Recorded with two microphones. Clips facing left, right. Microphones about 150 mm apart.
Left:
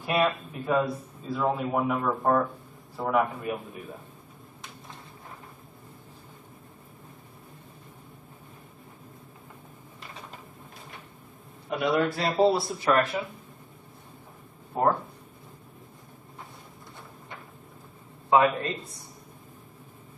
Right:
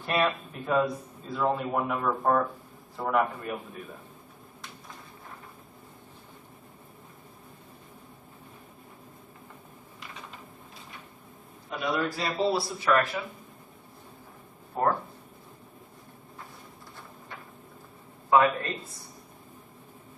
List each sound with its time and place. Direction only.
0.0 s speech: 5° left (ahead or behind)
11.7 s a man's voice: 65° left (ahead or behind)
12.9 s speech: 35° left (ahead or behind)
14.7 s speech: 15° left (ahead or behind)
18.3 s a man's voice: 20° left (ahead or behind)